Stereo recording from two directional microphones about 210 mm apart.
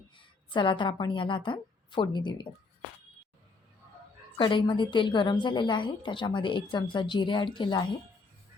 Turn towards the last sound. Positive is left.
turn(degrees=20)  # may be behind; listen again after turning